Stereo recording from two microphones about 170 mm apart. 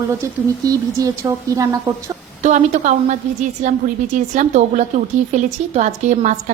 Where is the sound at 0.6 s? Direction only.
20° right (ahead or behind).